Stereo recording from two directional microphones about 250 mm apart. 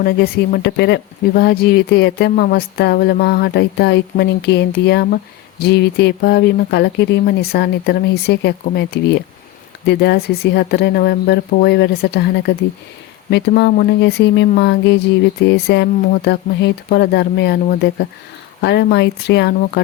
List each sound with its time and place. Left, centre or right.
0.0 s speech: left